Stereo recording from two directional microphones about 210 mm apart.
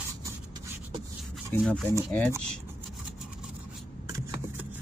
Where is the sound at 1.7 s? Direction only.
5° left (ahead or behind).